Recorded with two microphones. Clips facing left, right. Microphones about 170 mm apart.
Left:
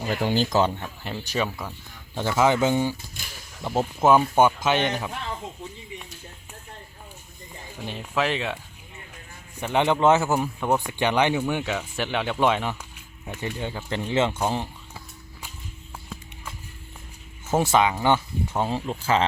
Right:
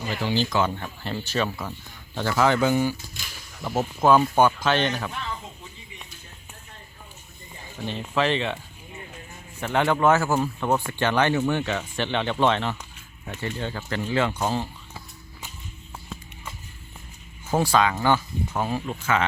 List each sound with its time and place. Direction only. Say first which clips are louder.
0.1 s speech: left 2 dB; 50° left (ahead or behind)
0.8 s a man's voice: right 2 dB; 5° left (ahead or behind)
1.5 s speech: right 2 dB; 5° right (ahead or behind)
2.1 s a man's voice: left 1 dB; 20° left (ahead or behind)
7.8 s a man's voice: right 1 dB; 10° left (ahead or behind)
9.6 s a man's voice: left 1 dB; 15° left (ahead or behind)
17.6 s speech: even; 20° left (ahead or behind)